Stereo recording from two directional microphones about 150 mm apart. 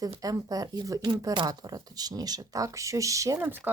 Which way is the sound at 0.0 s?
25° right (ahead or behind).